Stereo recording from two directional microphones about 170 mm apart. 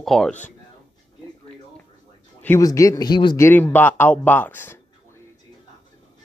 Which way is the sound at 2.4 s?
15° left (ahead or behind).